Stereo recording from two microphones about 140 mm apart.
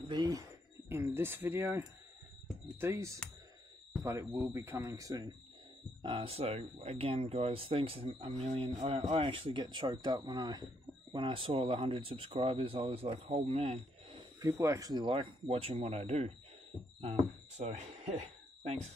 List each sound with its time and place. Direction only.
0.1 s speech: 25° right (ahead or behind)
6.0 s speech: 40° right (ahead or behind)
14.4 s speech: 25° right (ahead or behind)
15.1 s speech: 45° right (ahead or behind)
17.6 s speech: 50° right (ahead or behind)